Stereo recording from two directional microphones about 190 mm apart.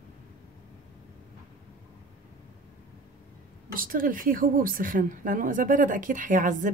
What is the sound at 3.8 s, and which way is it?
Speech, 45° right (ahead or behind).